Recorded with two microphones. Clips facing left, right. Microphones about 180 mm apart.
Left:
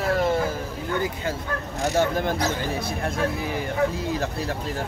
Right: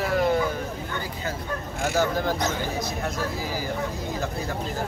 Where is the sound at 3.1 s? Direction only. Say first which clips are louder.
Left 3 dB; 65° left (ahead or behind).